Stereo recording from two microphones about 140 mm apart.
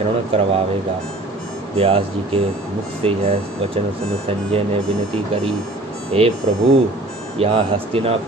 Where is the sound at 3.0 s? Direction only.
45° right (ahead or behind).